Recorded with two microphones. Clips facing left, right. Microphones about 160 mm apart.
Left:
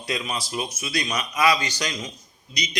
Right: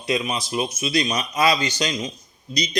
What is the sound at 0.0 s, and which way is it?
A man's voice, 20° right (ahead or behind).